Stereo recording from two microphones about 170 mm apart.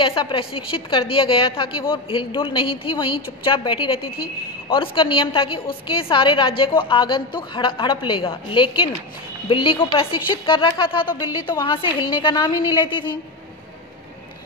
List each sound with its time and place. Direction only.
0.0 s a woman's voice: 30° left (ahead or behind)